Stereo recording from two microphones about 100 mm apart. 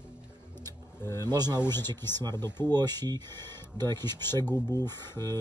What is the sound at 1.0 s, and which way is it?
Speech, 30° left (ahead or behind).